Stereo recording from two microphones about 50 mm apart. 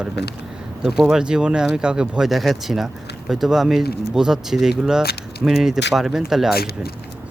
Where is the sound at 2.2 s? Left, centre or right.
Centre.